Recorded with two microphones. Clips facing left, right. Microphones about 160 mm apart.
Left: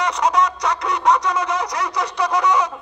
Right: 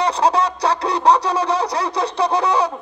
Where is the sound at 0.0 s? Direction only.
30° right (ahead or behind).